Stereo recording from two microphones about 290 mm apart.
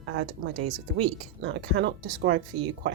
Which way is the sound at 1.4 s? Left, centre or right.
Right.